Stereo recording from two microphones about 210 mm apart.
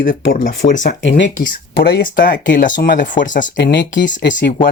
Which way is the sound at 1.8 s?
45° left (ahead or behind).